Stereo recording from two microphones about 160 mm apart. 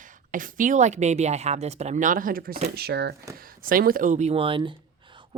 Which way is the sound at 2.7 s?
85° right.